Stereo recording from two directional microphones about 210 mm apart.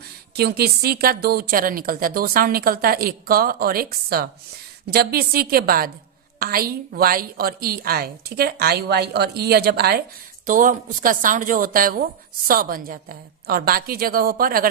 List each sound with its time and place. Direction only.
0.3 s a woman's voice: 50° right (ahead or behind)